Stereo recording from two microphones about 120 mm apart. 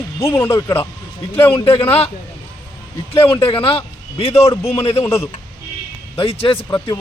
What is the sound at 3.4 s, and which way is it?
Speech, 50° left (ahead or behind).